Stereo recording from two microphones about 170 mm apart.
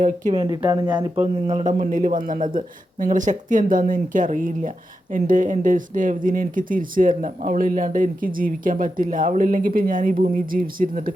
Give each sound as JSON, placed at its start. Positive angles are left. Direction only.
{"t": 0.3, "sound": "speech", "side_deg": -25}
{"t": 1.2, "sound": "speech", "side_deg": -40}